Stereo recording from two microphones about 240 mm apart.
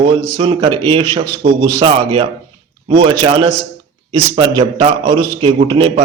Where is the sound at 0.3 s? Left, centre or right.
Right.